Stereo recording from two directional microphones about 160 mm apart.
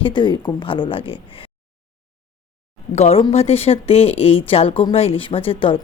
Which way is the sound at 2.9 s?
40° left (ahead or behind).